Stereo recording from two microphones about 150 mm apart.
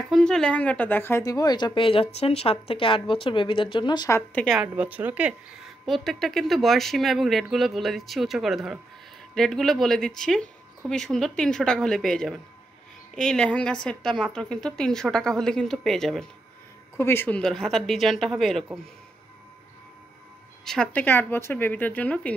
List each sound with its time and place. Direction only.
0.1 s speech: 5° left (ahead or behind); by 4.2 s 30° left (ahead or behind)
4.3 s speech: 10° left (ahead or behind)
4.6 s speech: 10° right (ahead or behind)
17.0 s speech: 15° left (ahead or behind)
17.4 s speech: centre (ahead or behind)
20.6 s speech: 5° left (ahead or behind)